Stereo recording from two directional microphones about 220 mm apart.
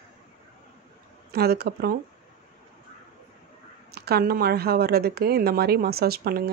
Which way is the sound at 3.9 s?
45° right (ahead or behind).